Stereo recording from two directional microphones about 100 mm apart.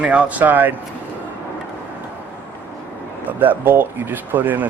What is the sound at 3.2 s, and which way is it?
Speech, 20° right (ahead or behind).